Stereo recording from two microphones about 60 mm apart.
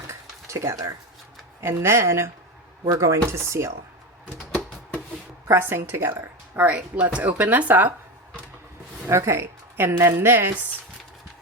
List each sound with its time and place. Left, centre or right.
0.1 s a sound: right
1.6 s speech: right
2.9 s speech: right
5.5 s a woman's voice: right
6.7 s speech: right
9.0 s speech: right